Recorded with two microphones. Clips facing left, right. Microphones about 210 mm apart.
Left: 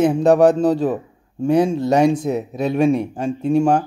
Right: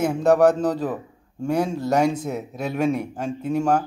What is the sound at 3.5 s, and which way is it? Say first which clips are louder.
Speech: left 7 dB; 10° left (ahead or behind).